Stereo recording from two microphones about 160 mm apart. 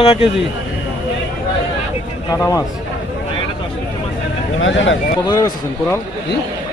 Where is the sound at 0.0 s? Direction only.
35° left (ahead or behind).